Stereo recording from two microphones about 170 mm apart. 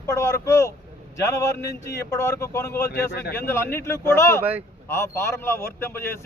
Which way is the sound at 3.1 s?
70° left (ahead or behind).